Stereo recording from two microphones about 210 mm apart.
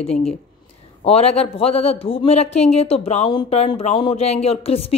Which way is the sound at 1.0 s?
30° left (ahead or behind).